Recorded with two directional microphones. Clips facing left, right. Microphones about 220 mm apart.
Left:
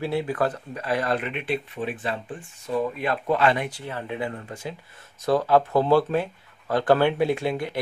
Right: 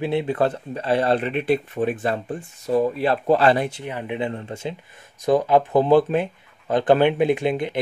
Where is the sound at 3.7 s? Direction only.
15° right (ahead or behind).